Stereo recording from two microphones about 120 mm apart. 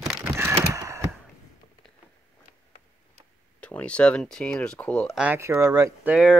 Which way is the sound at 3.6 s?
10° left (ahead or behind).